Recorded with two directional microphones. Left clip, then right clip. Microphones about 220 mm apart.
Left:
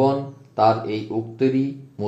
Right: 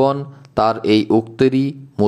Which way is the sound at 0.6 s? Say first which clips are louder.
Right 4 dB; 40° right (ahead or behind).